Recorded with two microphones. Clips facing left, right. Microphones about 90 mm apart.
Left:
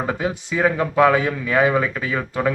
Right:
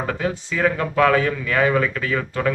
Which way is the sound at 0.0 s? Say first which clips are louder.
Left 1 dB; 15° left (ahead or behind).